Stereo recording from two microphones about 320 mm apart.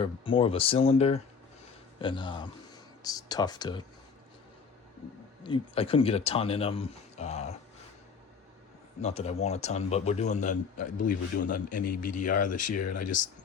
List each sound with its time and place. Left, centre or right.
0.0 s speech: centre
5.4 s speech: centre
9.0 s a man's voice: centre